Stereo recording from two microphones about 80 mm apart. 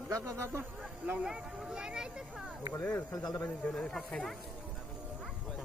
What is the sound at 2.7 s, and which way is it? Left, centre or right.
Speech, centre.